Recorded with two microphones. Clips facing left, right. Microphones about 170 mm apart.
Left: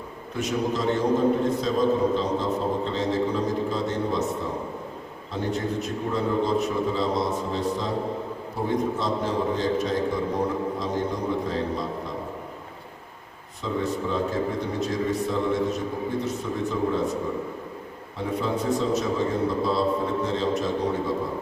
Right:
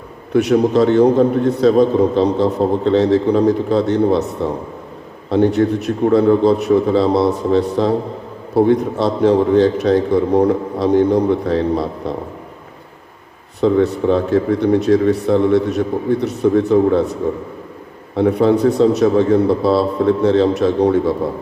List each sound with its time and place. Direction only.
0.3 s a man's voice: 70° right (ahead or behind)
13.6 s a man's voice: 70° right (ahead or behind)